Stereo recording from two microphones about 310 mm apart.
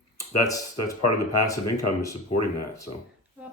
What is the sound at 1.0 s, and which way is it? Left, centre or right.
Speech, left.